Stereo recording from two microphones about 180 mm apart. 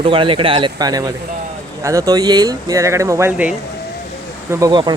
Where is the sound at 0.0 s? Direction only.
30° right (ahead or behind); by 3.5 s 10° right (ahead or behind).